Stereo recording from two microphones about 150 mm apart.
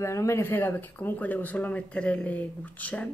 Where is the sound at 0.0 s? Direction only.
20° left (ahead or behind).